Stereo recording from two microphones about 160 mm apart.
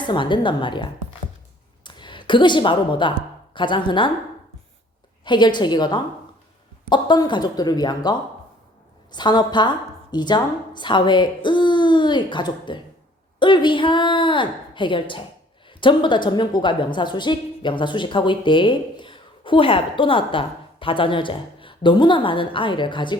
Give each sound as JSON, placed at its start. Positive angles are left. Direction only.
{"t": 0.1, "sound": "a woman's voice", "side_deg": 30}
{"t": 5.2, "sound": "a woman's voice", "side_deg": 30}